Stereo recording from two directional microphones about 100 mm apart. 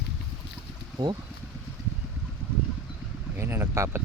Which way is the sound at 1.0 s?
45° right (ahead or behind).